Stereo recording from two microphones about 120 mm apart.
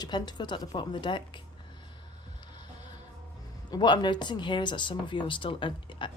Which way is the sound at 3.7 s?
40° left (ahead or behind).